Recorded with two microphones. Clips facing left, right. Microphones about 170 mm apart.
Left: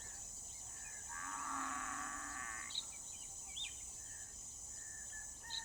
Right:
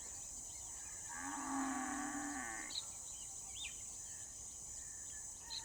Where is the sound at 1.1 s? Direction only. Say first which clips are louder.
Right 6 dB; 35° right (ahead or behind).